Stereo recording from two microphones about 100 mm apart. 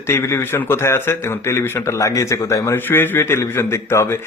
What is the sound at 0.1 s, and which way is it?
A man's voice, 25° left (ahead or behind).